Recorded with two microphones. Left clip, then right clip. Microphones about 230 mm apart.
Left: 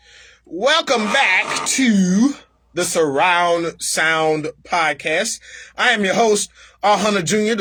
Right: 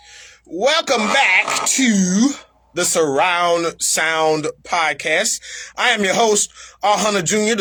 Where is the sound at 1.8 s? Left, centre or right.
Centre.